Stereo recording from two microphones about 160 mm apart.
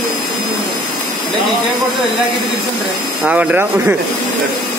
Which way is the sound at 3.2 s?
10° right (ahead or behind).